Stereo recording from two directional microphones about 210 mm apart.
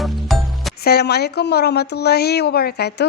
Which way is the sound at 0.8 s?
50° left (ahead or behind).